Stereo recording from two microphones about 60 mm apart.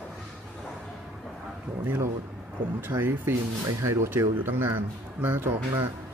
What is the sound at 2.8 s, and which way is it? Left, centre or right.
Speech, right.